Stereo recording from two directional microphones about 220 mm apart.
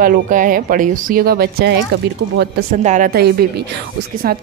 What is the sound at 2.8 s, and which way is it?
A woman's voice, 35° right (ahead or behind).